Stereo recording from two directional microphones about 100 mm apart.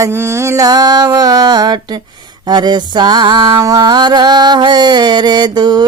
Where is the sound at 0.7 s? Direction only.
40° right (ahead or behind).